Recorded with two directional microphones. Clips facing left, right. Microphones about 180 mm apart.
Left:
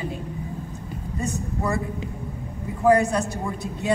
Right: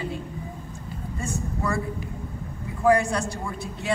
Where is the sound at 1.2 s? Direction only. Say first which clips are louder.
Left 2 dB; 20° left (ahead or behind).